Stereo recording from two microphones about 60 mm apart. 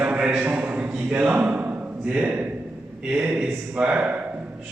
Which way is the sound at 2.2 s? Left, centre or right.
Right.